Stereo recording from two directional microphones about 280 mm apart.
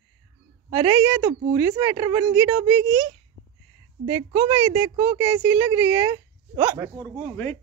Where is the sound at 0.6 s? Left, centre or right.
Centre.